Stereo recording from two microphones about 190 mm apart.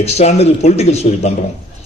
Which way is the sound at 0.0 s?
35° left (ahead or behind).